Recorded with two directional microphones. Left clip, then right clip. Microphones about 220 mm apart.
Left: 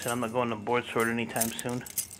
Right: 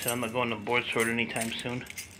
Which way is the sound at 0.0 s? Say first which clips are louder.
Left 1 dB; 15° left (ahead or behind).